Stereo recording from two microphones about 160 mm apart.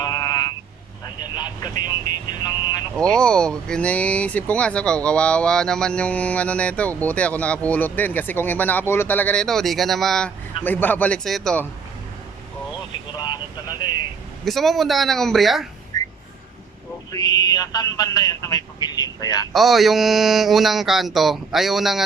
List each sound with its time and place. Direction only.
0.0 s a sound: 20° left (ahead or behind)
1.2 s vehicle: 25° left (ahead or behind)
2.9 s speech: 5° left (ahead or behind)
13.1 s vehicle: 25° left (ahead or behind)
14.4 s speech: centre (ahead or behind)
15.9 s a sound: 25° left (ahead or behind)
17.1 s speech: 25° left (ahead or behind)
19.5 s speech: centre (ahead or behind)